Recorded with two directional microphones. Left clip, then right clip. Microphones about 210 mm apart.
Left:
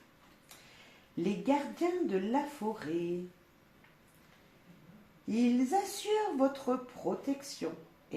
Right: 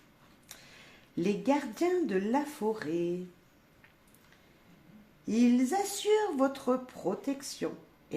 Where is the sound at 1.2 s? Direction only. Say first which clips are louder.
Right 2 dB; 40° right (ahead or behind).